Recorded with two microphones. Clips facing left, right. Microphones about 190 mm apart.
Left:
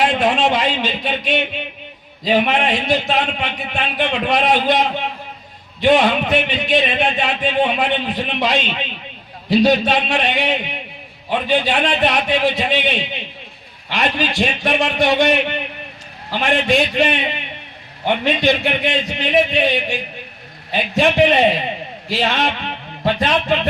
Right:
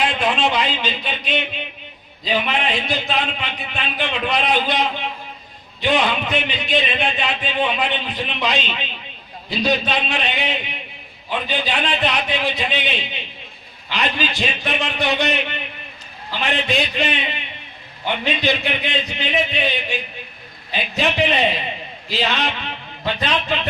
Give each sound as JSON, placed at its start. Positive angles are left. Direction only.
{"t": 0.0, "sound": "speech", "side_deg": 45}